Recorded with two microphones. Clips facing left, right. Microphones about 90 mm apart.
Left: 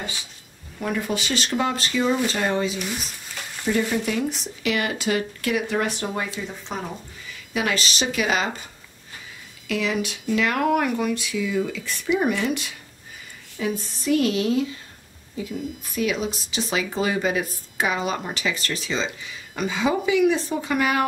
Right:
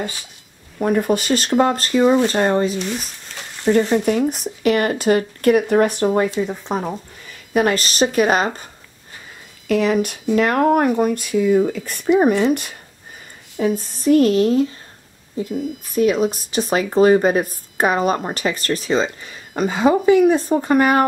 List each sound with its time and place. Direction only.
0.7 s speech: 45° right (ahead or behind)
2.8 s speech: centre (ahead or behind)
3.6 s speech: 50° right (ahead or behind)
9.7 s speech: 50° right (ahead or behind)